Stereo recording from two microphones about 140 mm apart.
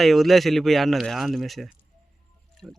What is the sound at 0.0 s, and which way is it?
Speech, centre (ahead or behind).